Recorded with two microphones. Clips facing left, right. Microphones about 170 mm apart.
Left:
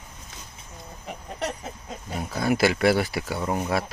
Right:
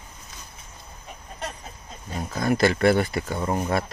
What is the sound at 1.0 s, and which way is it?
Chicken, 80° left.